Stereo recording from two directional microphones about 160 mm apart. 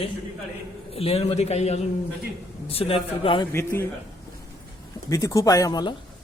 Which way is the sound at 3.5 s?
15° left (ahead or behind).